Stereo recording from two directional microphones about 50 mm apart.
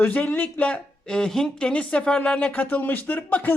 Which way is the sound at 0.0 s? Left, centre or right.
Left.